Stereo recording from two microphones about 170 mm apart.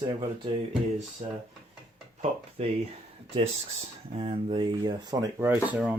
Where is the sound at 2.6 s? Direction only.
35° right (ahead or behind).